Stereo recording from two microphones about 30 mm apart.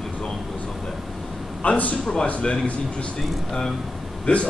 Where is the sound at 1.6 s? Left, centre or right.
Left.